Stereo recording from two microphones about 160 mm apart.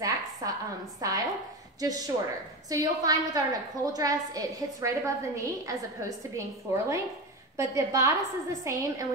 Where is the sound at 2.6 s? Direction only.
20° right (ahead or behind).